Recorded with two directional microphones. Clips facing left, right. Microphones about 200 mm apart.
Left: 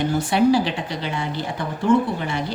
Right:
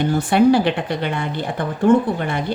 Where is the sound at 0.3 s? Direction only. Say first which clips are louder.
Right 4 dB; 55° right (ahead or behind).